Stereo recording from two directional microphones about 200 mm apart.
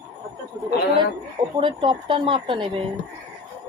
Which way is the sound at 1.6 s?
25° right (ahead or behind).